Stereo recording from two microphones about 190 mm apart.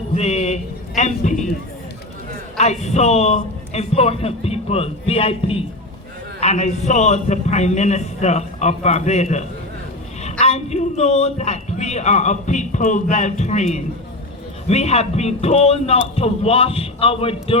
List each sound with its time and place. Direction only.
0.2 s a man's voice: 35° left (ahead or behind)
2.6 s a man's voice: 35° left (ahead or behind)